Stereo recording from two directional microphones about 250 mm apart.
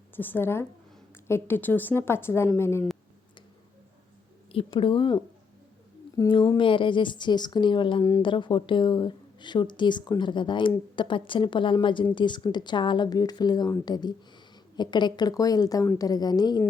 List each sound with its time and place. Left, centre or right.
0.2 s speech: centre
4.5 s speech: left